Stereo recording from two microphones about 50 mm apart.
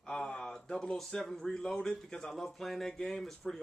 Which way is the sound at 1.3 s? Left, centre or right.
Centre.